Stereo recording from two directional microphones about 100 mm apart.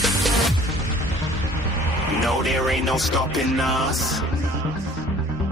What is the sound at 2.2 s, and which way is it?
Speech, centre (ahead or behind).